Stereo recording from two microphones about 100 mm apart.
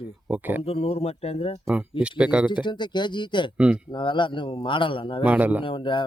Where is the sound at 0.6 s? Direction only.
80° left.